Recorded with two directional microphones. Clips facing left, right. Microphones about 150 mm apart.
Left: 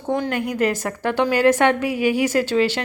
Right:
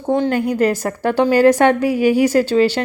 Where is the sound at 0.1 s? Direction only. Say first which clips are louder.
Right 6 dB; 30° right (ahead or behind).